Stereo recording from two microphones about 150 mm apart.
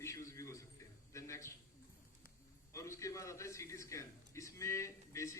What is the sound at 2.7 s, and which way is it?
A man's voice, 20° left (ahead or behind).